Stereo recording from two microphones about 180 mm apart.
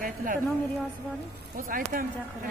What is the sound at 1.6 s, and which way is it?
Speech, 50° right (ahead or behind).